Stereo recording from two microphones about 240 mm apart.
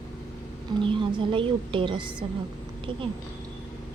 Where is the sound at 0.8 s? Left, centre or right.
Right.